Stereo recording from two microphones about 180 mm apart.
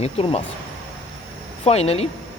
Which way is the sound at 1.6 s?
35° left (ahead or behind).